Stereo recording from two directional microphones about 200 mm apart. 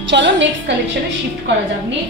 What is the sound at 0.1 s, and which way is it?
Speech, 65° right (ahead or behind).